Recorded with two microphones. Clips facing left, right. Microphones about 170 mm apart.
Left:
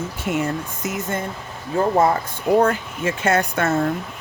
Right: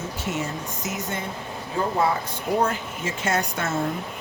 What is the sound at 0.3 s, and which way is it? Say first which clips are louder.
Speech: left 7 dB; 60° left (ahead or behind).